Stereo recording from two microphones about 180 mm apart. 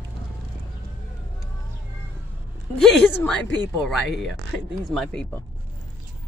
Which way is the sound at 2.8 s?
5° left (ahead or behind).